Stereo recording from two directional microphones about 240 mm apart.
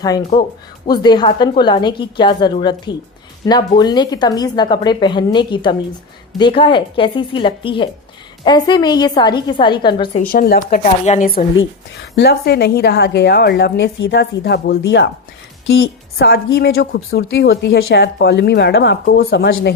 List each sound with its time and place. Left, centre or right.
0.3 s a woman's voice: centre
10.2 s a woman's voice: left